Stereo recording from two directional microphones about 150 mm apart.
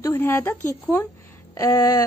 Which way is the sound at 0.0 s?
15° left (ahead or behind).